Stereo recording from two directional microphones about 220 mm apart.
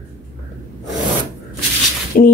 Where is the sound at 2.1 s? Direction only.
40° left (ahead or behind).